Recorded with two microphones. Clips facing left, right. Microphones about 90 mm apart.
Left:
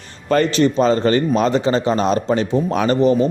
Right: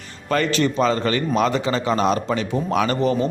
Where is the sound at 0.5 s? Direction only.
30° left (ahead or behind).